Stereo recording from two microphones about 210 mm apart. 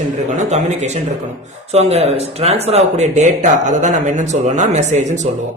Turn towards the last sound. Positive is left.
turn(degrees=-35)  # may be behind; listen again after turning